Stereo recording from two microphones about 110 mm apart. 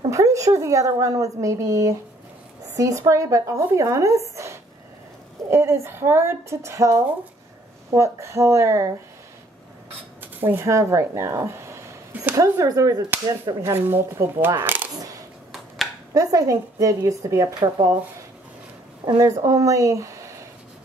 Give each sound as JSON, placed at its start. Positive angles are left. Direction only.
{"t": 0.1, "sound": "a woman's voice", "side_deg": -30}
{"t": 5.5, "sound": "a woman's voice", "side_deg": -25}
{"t": 10.2, "sound": "speech", "side_deg": -20}
{"t": 13.7, "sound": "a woman's voice", "side_deg": -20}
{"t": 16.1, "sound": "speech", "side_deg": -30}
{"t": 19.0, "sound": "speech", "side_deg": -35}